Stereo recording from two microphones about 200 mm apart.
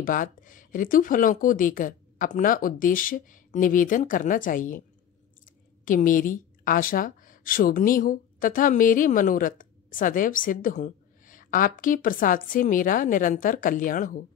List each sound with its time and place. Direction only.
0.0 s a woman's voice: 40° left (ahead or behind)